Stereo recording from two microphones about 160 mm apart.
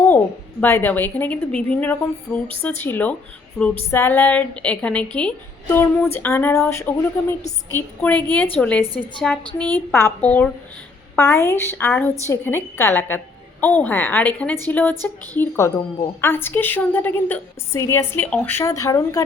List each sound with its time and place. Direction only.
0.6 s a woman's voice: 10° left (ahead or behind)